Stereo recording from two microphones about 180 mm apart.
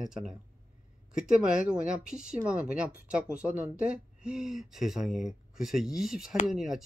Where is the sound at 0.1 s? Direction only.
5° right (ahead or behind).